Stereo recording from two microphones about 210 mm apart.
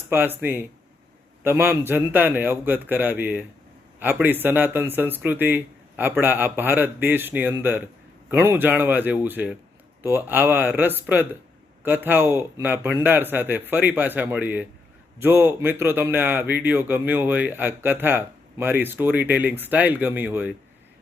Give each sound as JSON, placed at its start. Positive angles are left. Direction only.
{"t": 0.1, "sound": "speech", "side_deg": -10}